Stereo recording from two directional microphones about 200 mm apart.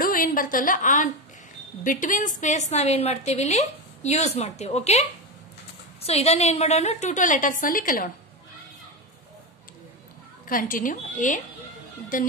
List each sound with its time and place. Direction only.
0.0 s a woman's voice: 45° left (ahead or behind)
10.4 s a woman's voice: 45° left (ahead or behind)